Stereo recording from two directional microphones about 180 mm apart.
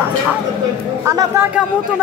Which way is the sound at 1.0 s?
15° right (ahead or behind).